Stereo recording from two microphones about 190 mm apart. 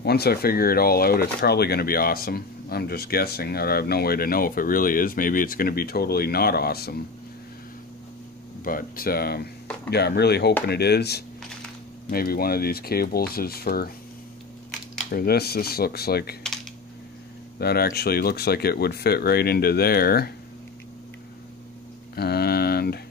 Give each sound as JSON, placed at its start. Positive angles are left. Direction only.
{"t": 0.0, "sound": "speech", "side_deg": 55}
{"t": 8.6, "sound": "speech", "side_deg": 50}
{"t": 15.0, "sound": "speech", "side_deg": 50}
{"t": 17.6, "sound": "speech", "side_deg": 55}
{"t": 22.1, "sound": "a sound", "side_deg": 55}